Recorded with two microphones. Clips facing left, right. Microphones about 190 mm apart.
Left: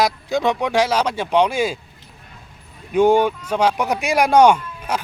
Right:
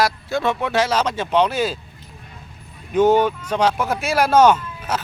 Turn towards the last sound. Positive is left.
turn(degrees=10)  # may be behind; listen again after turning